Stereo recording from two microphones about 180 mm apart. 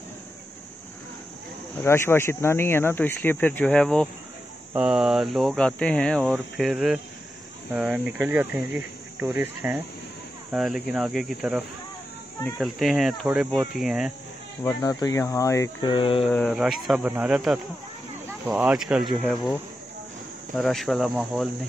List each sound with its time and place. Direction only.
1.8 s speech: 15° left (ahead or behind); by 14.1 s 5° right (ahead or behind)
14.6 s speech: 20° left (ahead or behind)
15.9 s speech: 30° left (ahead or behind)
16.3 s speech: 10° left (ahead or behind)
16.5 s speech: centre (ahead or behind)
20.5 s speech: centre (ahead or behind)